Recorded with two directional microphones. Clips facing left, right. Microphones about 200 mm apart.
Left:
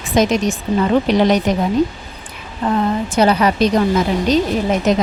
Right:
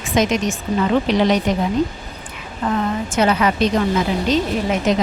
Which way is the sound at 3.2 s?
35° left (ahead or behind).